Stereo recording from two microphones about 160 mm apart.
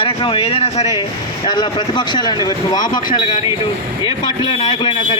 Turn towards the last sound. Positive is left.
turn(degrees=30)  # may be behind; listen again after turning